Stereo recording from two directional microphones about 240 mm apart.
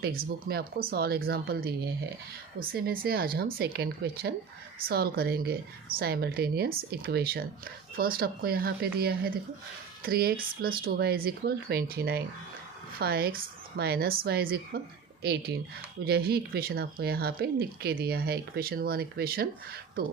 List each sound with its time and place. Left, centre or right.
0.0 s speech: right